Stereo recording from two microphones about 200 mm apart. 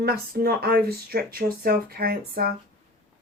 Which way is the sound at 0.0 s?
50° right (ahead or behind).